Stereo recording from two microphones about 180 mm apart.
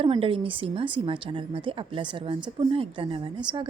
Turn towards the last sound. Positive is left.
turn(degrees=-25)  # may be behind; listen again after turning